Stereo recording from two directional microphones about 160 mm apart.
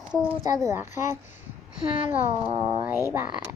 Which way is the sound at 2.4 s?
30° right (ahead or behind).